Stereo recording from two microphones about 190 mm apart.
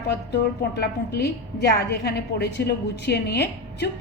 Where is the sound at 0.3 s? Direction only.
60° left (ahead or behind).